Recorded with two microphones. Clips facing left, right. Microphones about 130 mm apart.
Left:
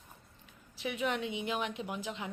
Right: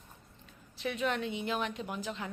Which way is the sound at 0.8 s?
15° left (ahead or behind).